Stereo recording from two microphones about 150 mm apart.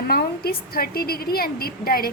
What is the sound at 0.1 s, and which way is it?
A woman's voice, 90° left.